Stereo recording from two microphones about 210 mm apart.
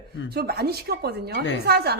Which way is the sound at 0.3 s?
50° right (ahead or behind).